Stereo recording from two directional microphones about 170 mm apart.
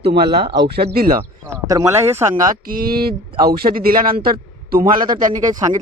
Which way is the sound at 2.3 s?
60° right (ahead or behind).